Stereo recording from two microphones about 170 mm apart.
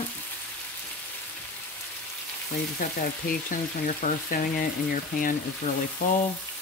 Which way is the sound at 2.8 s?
50° left (ahead or behind).